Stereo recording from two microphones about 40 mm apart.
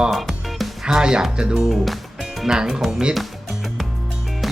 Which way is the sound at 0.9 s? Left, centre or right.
Centre.